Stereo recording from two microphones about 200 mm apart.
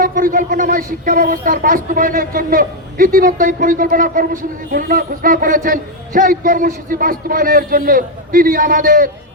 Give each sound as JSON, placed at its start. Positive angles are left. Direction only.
{"t": 0.0, "sound": "speech", "side_deg": -45}